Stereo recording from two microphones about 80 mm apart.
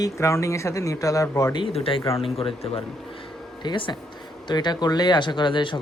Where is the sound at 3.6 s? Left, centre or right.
Left.